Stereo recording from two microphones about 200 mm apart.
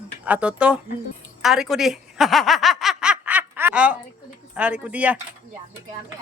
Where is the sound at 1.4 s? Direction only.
Centre (ahead or behind).